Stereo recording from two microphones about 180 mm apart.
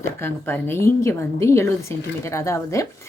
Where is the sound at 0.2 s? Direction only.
10° left (ahead or behind).